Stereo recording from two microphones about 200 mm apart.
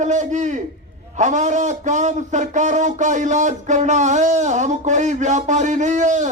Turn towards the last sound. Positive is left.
turn(degrees=-35)  # may be behind; listen again after turning